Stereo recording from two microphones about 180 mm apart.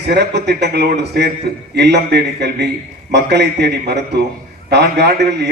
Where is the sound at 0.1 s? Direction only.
65° right (ahead or behind).